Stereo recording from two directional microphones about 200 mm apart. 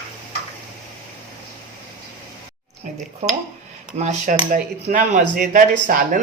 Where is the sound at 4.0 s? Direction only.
40° right (ahead or behind).